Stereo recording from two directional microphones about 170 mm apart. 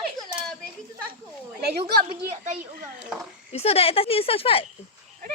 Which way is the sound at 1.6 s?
70° right (ahead or behind).